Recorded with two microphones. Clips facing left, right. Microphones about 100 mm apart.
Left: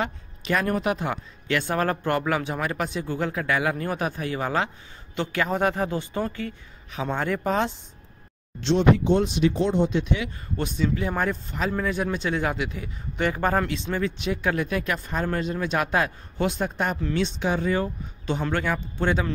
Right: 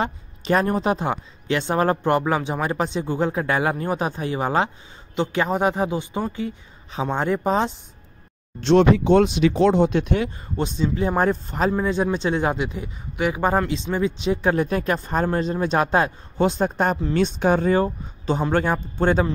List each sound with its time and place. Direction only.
0.0 s speech: 35° right (ahead or behind)
8.7 s speech: 80° right; by 10.2 s 55° right (ahead or behind)
10.6 s speech: 25° right (ahead or behind)
11.7 s speech: 25° right (ahead or behind)
13.2 s speech: 10° right (ahead or behind); by 19.2 s 40° right (ahead or behind)